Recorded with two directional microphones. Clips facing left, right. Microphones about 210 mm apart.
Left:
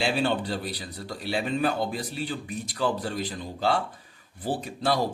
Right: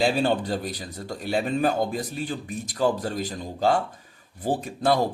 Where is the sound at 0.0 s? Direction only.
40° right (ahead or behind).